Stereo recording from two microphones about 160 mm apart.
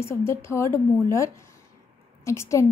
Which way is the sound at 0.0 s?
15° left (ahead or behind).